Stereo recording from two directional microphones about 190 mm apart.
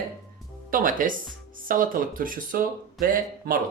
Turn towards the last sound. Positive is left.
turn(degrees=-45)  # may be behind; listen again after turning